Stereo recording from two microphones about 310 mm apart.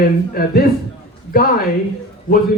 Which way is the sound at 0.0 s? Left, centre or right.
Left.